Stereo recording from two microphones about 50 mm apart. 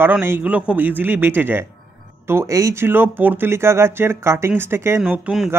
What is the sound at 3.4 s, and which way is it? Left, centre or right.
Speech, right.